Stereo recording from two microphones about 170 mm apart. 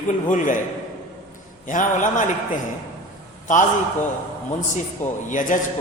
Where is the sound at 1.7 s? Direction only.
50° left (ahead or behind).